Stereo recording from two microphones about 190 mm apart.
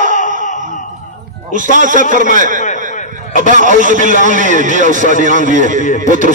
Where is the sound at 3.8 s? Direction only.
40° right (ahead or behind).